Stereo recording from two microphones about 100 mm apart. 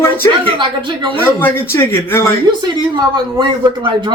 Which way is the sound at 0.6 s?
55° right (ahead or behind).